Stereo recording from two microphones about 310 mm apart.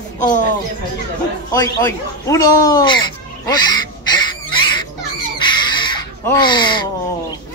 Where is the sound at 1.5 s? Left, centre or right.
Centre.